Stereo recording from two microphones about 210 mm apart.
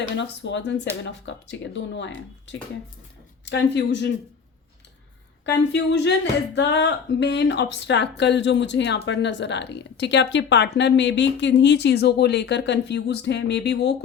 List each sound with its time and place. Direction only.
0.2 s speech: 55° left (ahead or behind)
5.5 s speech: 55° left (ahead or behind)